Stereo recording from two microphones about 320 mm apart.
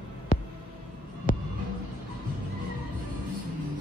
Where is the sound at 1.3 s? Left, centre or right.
Left.